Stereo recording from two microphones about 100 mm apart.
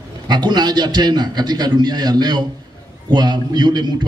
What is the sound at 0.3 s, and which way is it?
A man's voice, 45° right (ahead or behind).